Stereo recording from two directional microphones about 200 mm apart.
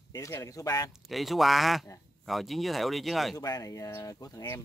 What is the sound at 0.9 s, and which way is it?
Speech, centre (ahead or behind).